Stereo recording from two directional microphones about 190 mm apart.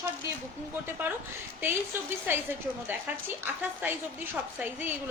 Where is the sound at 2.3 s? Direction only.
10° right (ahead or behind).